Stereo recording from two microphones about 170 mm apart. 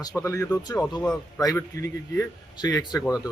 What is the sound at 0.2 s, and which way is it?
Speech, 20° left (ahead or behind).